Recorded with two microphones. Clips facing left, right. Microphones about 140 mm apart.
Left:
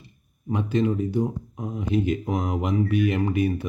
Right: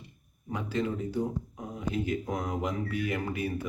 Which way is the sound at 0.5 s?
20° left (ahead or behind).